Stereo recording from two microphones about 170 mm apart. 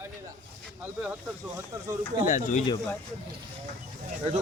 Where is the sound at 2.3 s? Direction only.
45° left (ahead or behind).